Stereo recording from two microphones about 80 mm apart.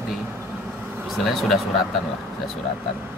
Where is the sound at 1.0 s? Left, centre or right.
Centre.